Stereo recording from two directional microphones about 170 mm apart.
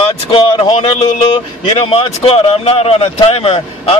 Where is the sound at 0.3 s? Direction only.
35° left (ahead or behind).